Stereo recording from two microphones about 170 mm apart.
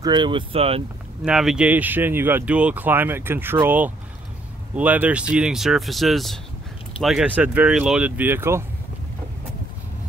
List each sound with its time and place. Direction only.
0.0 s speech: 25° right (ahead or behind)
1.2 s speech: 5° right (ahead or behind)